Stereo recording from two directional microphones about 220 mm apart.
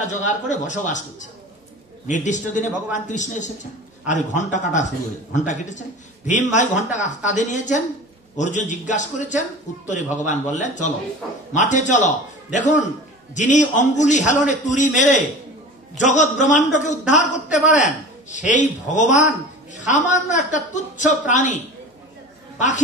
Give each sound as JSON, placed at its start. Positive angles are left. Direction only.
{"t": 0.0, "sound": "a man's voice", "side_deg": 35}